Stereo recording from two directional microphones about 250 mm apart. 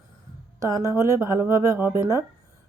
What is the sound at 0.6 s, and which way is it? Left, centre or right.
A woman's voice, centre.